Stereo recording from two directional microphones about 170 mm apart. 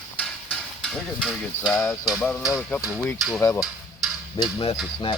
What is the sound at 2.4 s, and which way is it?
Speech, centre (ahead or behind).